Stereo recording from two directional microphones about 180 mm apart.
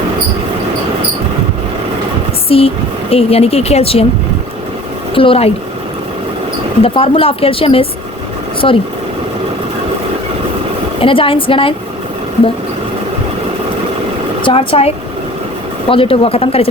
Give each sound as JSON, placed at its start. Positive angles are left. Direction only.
{"t": 2.5, "sound": "speech", "side_deg": 30}
{"t": 5.1, "sound": "speech", "side_deg": 30}
{"t": 6.8, "sound": "speech", "side_deg": 30}
{"t": 11.0, "sound": "a woman's voice", "side_deg": 30}
{"t": 14.4, "sound": "speech", "side_deg": 30}